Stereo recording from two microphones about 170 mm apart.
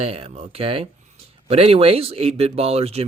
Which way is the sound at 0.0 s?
35° right (ahead or behind).